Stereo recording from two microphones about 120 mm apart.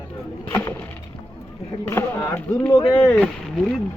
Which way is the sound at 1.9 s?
25° left (ahead or behind).